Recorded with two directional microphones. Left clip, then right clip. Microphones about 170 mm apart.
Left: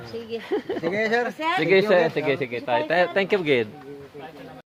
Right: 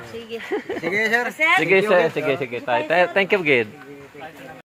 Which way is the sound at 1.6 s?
Centre (ahead or behind).